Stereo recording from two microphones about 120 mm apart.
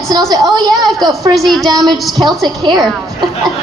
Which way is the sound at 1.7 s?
35° right (ahead or behind).